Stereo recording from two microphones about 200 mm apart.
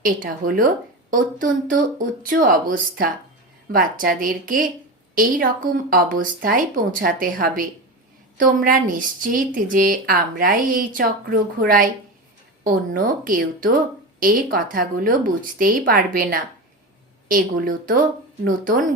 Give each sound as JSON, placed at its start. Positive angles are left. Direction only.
{"t": 0.0, "sound": "a woman's voice", "side_deg": -45}